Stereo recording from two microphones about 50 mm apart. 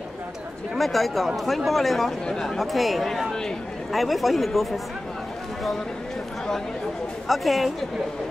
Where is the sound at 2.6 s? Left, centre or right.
Centre.